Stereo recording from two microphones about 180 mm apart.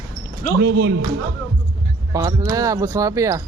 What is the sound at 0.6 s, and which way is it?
Speech, 75° right (ahead or behind).